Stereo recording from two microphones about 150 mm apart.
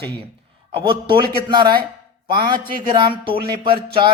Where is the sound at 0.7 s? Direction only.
35° right (ahead or behind).